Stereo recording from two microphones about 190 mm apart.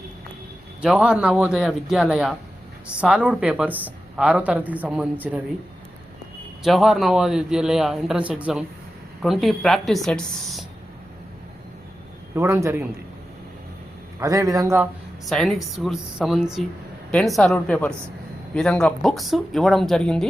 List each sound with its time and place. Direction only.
0.8 s a man's voice: 5° right (ahead or behind)
6.6 s a man's voice: centre (ahead or behind)
12.3 s speech: 15° right (ahead or behind)
14.2 s speech: 15° right (ahead or behind)
15.3 s a man's voice: centre (ahead or behind)